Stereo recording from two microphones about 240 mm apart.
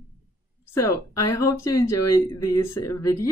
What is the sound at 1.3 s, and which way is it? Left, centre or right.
Speech, centre.